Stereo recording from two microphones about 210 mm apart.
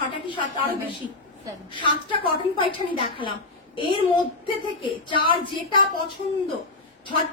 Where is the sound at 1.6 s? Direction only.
25° left (ahead or behind).